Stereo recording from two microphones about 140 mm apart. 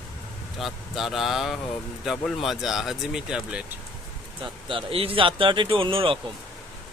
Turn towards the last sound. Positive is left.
turn(degrees=-40)  # may be behind; listen again after turning